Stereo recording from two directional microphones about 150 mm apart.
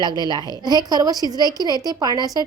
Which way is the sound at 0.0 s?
30° right (ahead or behind).